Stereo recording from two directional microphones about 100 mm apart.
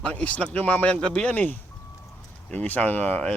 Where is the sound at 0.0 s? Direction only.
10° left (ahead or behind).